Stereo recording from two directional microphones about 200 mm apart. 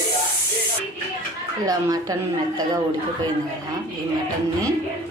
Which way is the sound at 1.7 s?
15° right (ahead or behind).